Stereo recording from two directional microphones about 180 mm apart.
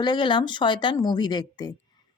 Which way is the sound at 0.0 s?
25° left (ahead or behind).